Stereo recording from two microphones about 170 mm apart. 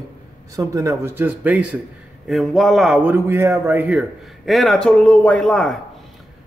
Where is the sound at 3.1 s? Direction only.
15° right (ahead or behind).